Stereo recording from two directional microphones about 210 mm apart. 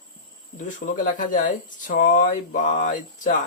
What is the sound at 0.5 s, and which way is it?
Speech, 35° left (ahead or behind).